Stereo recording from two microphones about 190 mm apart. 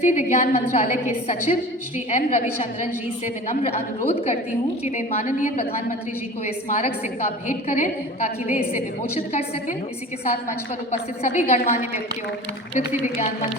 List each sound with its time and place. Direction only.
0.0 s a woman's voice: 40° left (ahead or behind)
6.7 s a woman's voice: 35° left (ahead or behind)
11.2 s a woman's voice: 35° left (ahead or behind)